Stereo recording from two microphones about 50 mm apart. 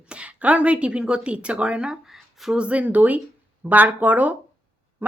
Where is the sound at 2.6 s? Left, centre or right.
Right.